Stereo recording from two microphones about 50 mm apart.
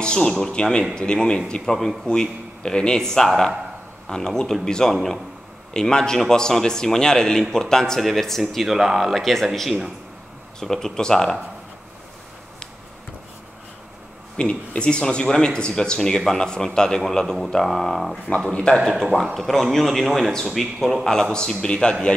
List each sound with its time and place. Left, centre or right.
0.0 s a man's voice: centre
4.9 s speech: centre
5.7 s a man's voice: centre
14.3 s a man's voice: left; by 18.2 s centre
18.5 s a man's voice: centre
19.3 s a man's voice: centre